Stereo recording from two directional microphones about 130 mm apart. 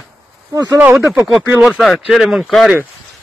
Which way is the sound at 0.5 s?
30° right (ahead or behind).